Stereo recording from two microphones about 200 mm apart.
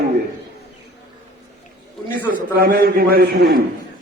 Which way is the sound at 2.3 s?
45° right (ahead or behind).